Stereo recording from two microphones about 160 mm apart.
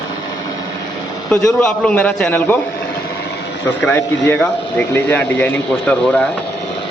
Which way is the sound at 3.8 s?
10° left (ahead or behind).